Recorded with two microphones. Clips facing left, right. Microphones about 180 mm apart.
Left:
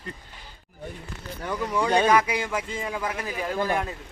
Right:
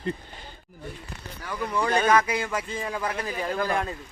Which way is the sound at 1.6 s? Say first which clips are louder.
Left 2 dB; 10° left (ahead or behind).